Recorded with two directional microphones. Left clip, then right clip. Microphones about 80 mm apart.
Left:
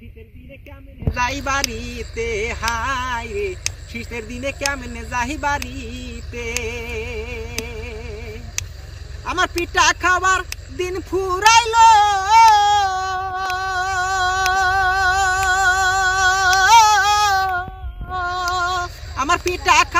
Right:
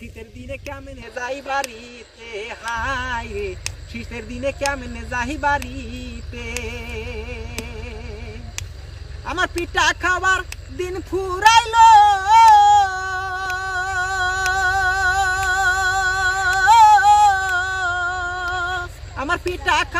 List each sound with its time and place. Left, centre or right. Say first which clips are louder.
1.1 s speech: left 3 dB; centre
5.7 s vehicle: left 1 dB; centre
6.6 s speech: left 4 dB; centre
9.2 s speech: left 2 dB; centre
12.5 s a sound: right 3 dB; right
16.4 s singing: right 1 dB; centre
18.1 s music: left 2 dB; centre
18.5 s a sound: left 3 dB; centre
19.5 s speech: left 5 dB; centre